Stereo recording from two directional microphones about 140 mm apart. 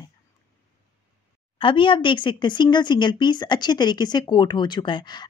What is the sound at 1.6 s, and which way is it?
Speech, 35° left (ahead or behind).